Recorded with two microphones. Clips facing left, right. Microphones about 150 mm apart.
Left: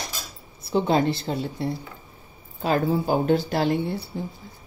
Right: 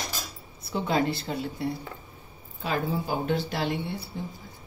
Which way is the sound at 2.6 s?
45° left (ahead or behind).